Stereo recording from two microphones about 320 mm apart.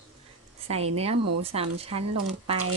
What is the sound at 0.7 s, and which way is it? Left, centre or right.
Speech, centre.